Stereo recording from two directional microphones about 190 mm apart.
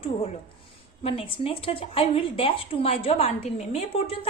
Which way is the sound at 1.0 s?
30° left (ahead or behind).